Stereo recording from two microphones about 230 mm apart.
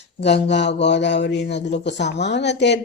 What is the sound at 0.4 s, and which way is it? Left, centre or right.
A man's voice, left.